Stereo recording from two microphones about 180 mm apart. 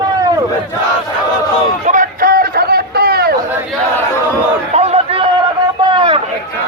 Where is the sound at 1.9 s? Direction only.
50° right (ahead or behind).